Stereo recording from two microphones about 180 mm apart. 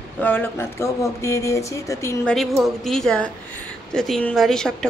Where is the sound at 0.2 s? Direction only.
10° left (ahead or behind).